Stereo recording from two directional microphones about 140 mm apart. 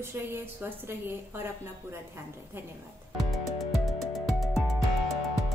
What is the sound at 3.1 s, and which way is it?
Music, centre (ahead or behind).